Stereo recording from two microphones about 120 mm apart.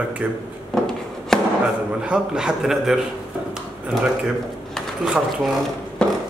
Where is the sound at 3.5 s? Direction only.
5° right (ahead or behind).